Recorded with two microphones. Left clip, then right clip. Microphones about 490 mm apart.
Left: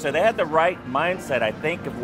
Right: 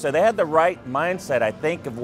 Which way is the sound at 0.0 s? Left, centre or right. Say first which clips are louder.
Right 2 dB; right.